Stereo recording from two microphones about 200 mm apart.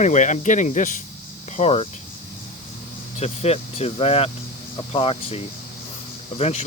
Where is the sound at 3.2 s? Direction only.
30° left (ahead or behind).